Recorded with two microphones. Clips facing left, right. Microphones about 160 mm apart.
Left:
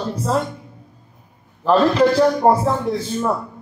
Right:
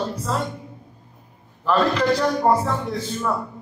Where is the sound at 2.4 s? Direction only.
35° left (ahead or behind).